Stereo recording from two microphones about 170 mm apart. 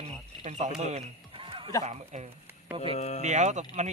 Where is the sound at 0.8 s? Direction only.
40° right (ahead or behind).